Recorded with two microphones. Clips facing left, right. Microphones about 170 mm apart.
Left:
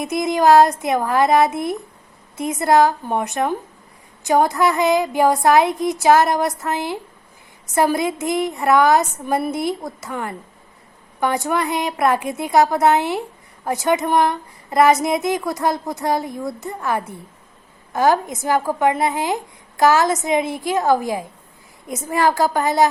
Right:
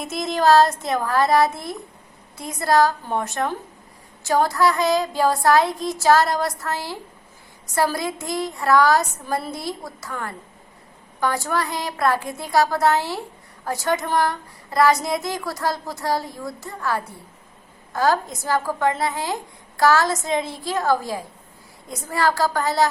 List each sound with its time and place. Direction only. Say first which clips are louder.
0.0 s a woman's voice: left 4 dB; 15° left (ahead or behind)